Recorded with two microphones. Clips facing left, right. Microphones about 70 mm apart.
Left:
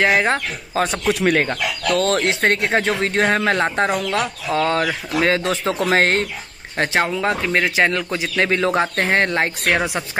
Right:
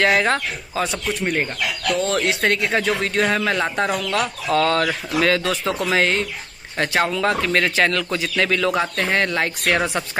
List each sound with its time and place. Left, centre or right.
0.0 s a man's voice: centre
0.7 s speech: left
1.0 s speech: left
1.9 s speech: left
2.1 s a man's voice: left
5.9 s speech: left
6.8 s a man's voice: left
9.8 s speech: centre